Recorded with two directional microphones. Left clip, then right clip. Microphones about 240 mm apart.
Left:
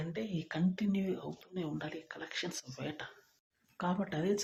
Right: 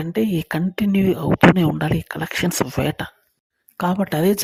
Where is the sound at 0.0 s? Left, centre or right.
Right.